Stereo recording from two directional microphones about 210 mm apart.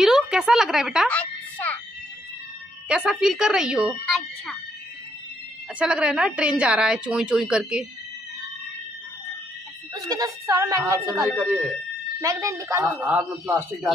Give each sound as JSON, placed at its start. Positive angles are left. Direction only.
{"t": 0.0, "sound": "music", "side_deg": -5}
{"t": 2.9, "sound": "a woman's voice", "side_deg": -5}
{"t": 5.8, "sound": "a woman's voice", "side_deg": -5}
{"t": 9.9, "sound": "speech", "side_deg": -15}